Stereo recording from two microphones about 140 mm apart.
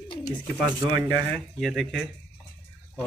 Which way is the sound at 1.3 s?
Centre (ahead or behind).